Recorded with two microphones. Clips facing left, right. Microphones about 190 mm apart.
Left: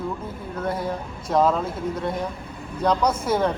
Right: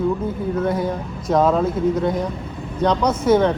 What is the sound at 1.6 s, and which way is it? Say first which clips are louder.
Speech: right 8 dB; 55° right (ahead or behind).